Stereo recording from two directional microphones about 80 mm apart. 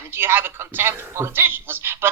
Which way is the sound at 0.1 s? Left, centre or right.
Right.